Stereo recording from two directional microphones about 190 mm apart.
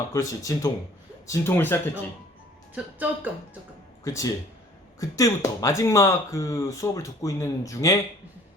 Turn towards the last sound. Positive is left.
turn(degrees=15)  # may be behind; listen again after turning